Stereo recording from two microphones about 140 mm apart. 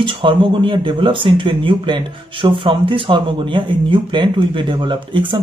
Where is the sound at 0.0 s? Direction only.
35° right (ahead or behind).